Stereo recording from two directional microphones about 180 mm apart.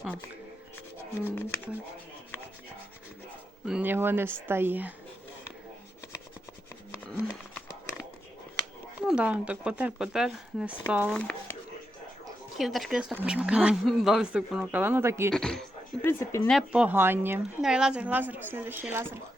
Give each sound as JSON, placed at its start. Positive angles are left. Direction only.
{"t": 1.2, "sound": "speech", "side_deg": 10}
{"t": 3.7, "sound": "a woman's voice", "side_deg": -10}
{"t": 7.1, "sound": "a sound", "side_deg": 0}
{"t": 9.0, "sound": "a woman's voice", "side_deg": -5}
{"t": 12.5, "sound": "speech", "side_deg": 0}
{"t": 15.3, "sound": "speech", "side_deg": 5}
{"t": 16.1, "sound": "speech", "side_deg": 15}
{"t": 16.5, "sound": "a woman's voice", "side_deg": -5}